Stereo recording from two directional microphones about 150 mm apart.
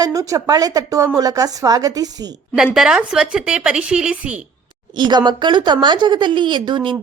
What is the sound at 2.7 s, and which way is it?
Speech, 5° right (ahead or behind).